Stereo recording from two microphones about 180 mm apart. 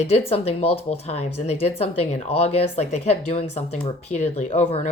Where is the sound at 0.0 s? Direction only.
35° left (ahead or behind).